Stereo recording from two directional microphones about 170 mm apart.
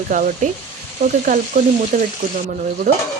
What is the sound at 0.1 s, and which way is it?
Speech, 50° right (ahead or behind).